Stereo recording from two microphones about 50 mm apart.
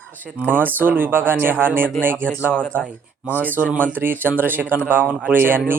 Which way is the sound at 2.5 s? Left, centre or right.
Left.